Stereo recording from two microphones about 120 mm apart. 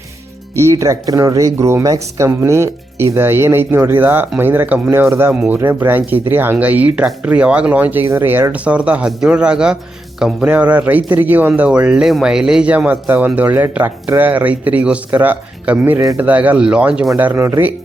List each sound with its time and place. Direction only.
0.5 s speech: 25° right (ahead or behind)